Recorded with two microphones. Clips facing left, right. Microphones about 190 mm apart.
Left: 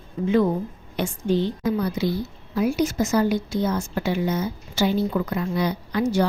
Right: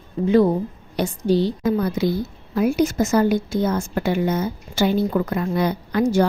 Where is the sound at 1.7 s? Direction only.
50° right (ahead or behind).